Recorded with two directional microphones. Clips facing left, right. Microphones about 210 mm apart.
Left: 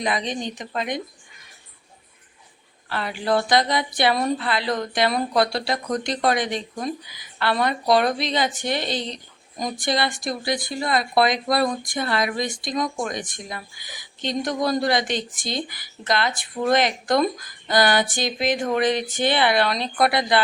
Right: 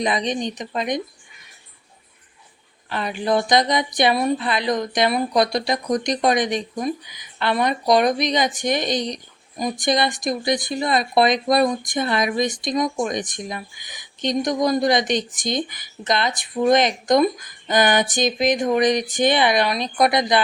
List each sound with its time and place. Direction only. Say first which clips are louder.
0.0 s speech: right 3 dB; 20° right (ahead or behind)
2.9 s a woman's voice: right 2 dB; 20° right (ahead or behind)